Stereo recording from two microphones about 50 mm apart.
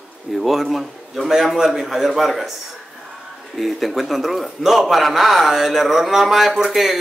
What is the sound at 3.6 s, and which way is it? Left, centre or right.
A man's voice, centre.